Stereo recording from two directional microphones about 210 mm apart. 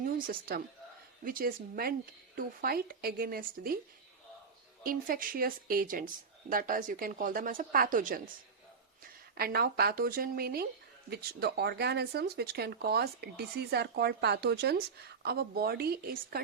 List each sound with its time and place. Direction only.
0.0 s a woman's voice: 45° right (ahead or behind)
4.8 s speech: 45° right (ahead or behind)
9.3 s speech: 50° right (ahead or behind)